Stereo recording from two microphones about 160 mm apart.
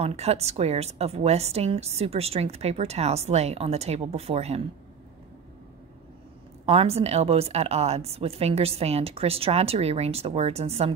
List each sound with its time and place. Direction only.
0.0 s a woman's voice: 40° right (ahead or behind)
6.6 s a woman's voice: 35° right (ahead or behind)